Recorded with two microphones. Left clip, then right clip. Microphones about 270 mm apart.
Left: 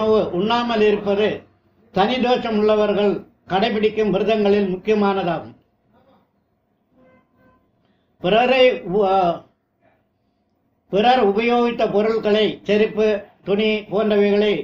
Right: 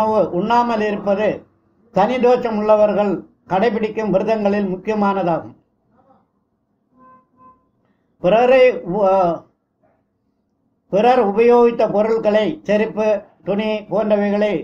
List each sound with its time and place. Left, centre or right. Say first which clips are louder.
0.1 s a man's voice: right 2 dB; right
8.2 s a man's voice: right 3 dB; right
10.9 s a man's voice: right 2 dB; right